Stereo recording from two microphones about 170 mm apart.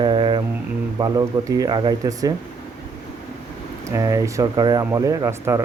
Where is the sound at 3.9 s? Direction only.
20° right (ahead or behind).